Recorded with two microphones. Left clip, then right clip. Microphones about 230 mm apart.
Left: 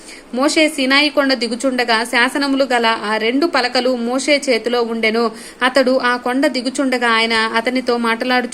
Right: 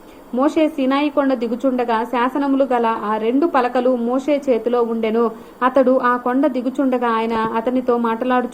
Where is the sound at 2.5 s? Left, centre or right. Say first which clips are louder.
Left 1 dB; left.